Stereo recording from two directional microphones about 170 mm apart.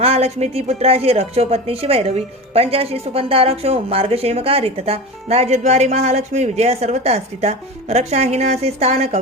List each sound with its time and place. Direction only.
0.0 s a woman's voice: 35° right (ahead or behind)